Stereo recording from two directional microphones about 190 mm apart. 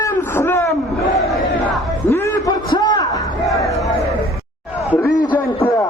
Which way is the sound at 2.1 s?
15° left (ahead or behind).